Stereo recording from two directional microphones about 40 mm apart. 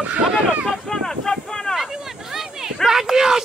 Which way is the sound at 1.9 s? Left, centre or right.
Centre.